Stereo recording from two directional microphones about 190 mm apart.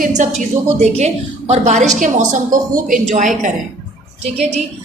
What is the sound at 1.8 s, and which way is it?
A woman's voice, 40° right (ahead or behind).